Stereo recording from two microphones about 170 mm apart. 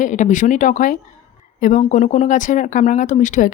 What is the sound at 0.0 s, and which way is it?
Speech, 45° left (ahead or behind).